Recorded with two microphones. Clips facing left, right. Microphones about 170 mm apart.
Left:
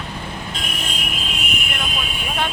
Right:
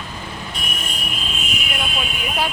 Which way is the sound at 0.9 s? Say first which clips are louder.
Left 1 dB; 75° left (ahead or behind).